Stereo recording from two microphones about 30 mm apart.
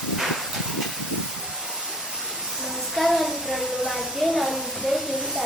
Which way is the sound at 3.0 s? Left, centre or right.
Centre.